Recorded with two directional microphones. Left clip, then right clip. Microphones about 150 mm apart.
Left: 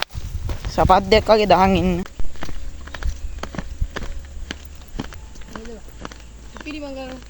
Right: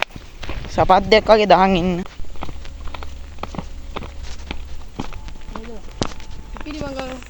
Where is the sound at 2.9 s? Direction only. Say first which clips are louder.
Left 1 dB; 15° left (ahead or behind).